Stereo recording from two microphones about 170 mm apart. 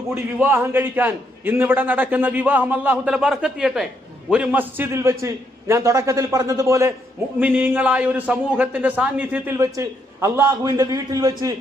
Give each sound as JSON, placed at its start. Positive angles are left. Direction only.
{"t": 0.1, "sound": "a man's voice", "side_deg": -15}